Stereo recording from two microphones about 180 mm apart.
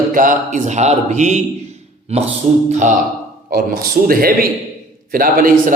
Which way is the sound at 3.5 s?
55° right (ahead or behind).